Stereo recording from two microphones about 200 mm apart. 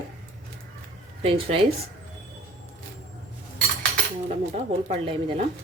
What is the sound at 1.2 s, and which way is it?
Speech, 25° right (ahead or behind).